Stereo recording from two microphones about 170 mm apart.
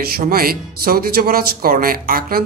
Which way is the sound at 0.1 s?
60° right (ahead or behind).